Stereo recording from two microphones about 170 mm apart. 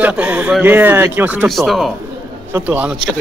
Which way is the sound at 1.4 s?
Centre (ahead or behind).